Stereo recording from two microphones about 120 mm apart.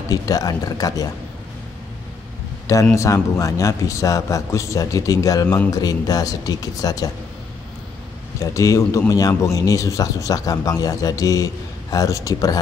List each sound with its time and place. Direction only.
0.1 s speech: 30° left (ahead or behind)
2.6 s a man's voice: 25° left (ahead or behind)
8.4 s a man's voice: 25° left (ahead or behind)